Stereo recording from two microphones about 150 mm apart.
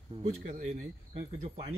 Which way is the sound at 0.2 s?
45° right (ahead or behind).